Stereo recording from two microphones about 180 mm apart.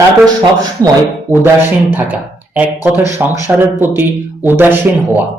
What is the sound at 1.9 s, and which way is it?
Speech, 10° right (ahead or behind).